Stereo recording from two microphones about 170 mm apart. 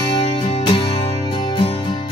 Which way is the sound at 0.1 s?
35° left (ahead or behind).